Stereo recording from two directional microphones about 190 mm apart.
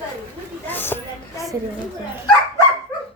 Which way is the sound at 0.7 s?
10° left (ahead or behind).